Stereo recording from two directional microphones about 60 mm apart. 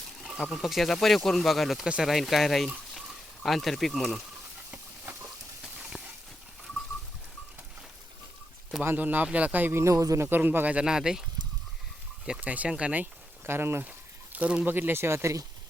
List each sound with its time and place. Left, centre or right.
0.5 s speech: centre
5.2 s a sound: centre
8.8 s a man's voice: right
9.7 s speech: right
10.2 s a man's voice: right
10.8 s speech: centre
12.4 s speech: right
13.4 s speech: right
14.3 s speech: right
14.7 s speech: right